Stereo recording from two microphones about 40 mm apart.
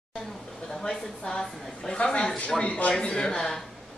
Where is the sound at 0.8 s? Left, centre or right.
Centre.